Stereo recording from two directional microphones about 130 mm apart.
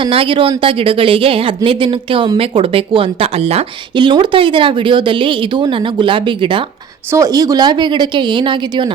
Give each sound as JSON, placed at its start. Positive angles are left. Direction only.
{"t": 0.0, "sound": "a woman's voice", "side_deg": -45}
{"t": 3.9, "sound": "speech", "side_deg": -40}
{"t": 7.1, "sound": "speech", "side_deg": -25}